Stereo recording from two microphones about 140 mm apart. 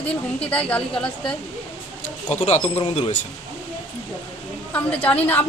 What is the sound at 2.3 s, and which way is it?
Speech, 50° left (ahead or behind).